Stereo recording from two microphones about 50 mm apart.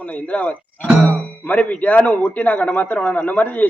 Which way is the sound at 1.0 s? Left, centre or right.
Left.